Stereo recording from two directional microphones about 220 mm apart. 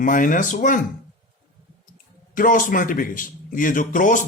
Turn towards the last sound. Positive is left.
turn(degrees=35)  # may be behind; listen again after turning